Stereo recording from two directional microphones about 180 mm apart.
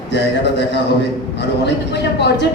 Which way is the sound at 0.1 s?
70° left (ahead or behind).